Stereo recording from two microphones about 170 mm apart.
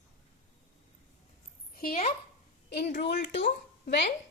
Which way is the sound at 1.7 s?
60° left (ahead or behind).